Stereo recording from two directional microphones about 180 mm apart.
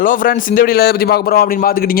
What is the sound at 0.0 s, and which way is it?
A man's voice, 50° left (ahead or behind).